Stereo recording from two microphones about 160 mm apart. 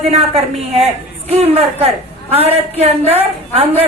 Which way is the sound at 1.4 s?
40° right (ahead or behind).